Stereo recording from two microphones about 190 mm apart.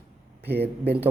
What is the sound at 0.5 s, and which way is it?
Speech, 60° right (ahead or behind).